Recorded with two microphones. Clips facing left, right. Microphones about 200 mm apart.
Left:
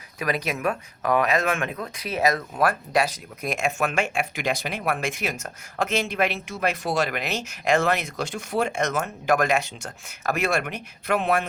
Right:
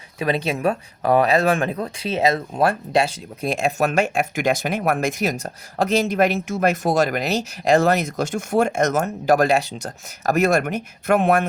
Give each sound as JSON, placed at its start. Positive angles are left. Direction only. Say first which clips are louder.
{"t": 0.2, "sound": "speech", "louder": "right 5 dB", "side_deg": -30}